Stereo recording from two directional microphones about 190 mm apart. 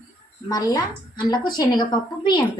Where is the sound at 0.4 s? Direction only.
20° left (ahead or behind).